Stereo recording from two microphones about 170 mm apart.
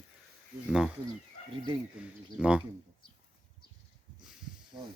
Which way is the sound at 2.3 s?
5° right (ahead or behind).